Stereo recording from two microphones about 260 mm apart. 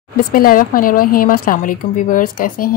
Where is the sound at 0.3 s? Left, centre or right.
Left.